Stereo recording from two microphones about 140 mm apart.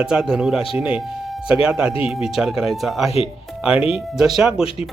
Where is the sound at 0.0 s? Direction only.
5° right (ahead or behind).